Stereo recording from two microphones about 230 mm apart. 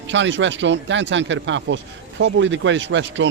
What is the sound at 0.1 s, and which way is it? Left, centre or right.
Speech, right.